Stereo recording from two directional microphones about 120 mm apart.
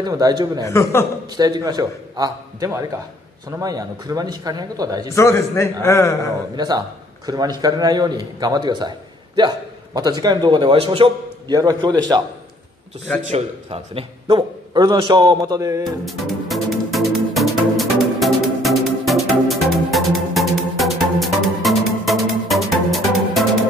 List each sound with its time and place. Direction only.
0.0 s a man's voice: 35° right (ahead or behind)
0.7 s a man's voice: 25° left (ahead or behind)
1.3 s a man's voice: 35° right (ahead or behind)
5.1 s a man's voice: 20° left (ahead or behind)
6.5 s a man's voice: 35° right (ahead or behind)
11.5 s a man's voice: 35° right (ahead or behind)
13.2 s a man's voice: 65° right (ahead or behind)
14.7 s a man's voice: 35° right (ahead or behind)
15.8 s music: centre (ahead or behind)